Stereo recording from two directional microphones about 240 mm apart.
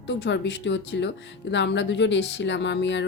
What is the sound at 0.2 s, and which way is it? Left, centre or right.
Speech, left.